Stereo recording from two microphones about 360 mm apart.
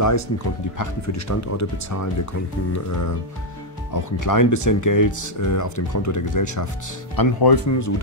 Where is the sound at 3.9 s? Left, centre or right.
Left.